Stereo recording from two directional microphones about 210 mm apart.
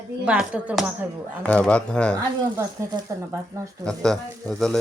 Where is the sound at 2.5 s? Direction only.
20° right (ahead or behind).